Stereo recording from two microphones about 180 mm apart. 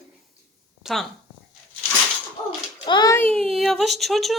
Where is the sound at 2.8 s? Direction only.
25° left (ahead or behind).